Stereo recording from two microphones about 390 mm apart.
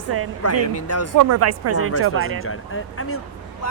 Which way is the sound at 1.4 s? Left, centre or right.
Right.